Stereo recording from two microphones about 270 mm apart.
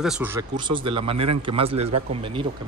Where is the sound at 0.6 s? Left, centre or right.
Centre.